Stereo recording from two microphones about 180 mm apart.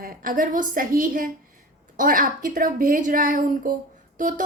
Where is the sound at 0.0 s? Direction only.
50° right (ahead or behind).